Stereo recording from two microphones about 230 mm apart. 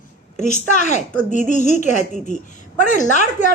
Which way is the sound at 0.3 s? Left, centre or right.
Left.